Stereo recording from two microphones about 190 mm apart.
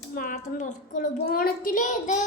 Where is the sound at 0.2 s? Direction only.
45° left (ahead or behind).